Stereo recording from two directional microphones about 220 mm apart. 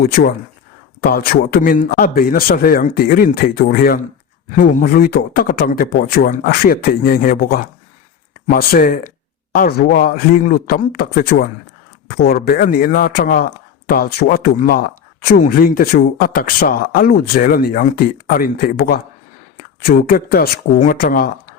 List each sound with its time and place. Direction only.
0.0 s a man's voice: 45° left (ahead or behind)